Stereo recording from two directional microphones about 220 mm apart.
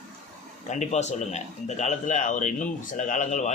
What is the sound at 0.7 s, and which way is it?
Speech, 30° left (ahead or behind).